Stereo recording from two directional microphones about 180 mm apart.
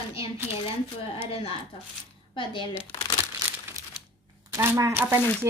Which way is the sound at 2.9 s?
25° left (ahead or behind).